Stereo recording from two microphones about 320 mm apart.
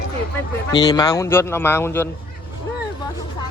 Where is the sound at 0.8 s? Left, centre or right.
Centre.